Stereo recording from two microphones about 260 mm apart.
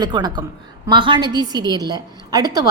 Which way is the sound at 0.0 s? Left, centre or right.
Centre.